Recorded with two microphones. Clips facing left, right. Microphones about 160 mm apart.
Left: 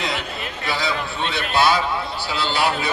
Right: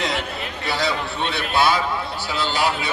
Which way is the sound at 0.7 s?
75° right (ahead or behind).